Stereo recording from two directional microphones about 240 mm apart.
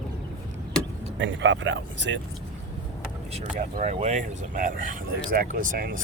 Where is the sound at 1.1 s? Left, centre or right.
Right.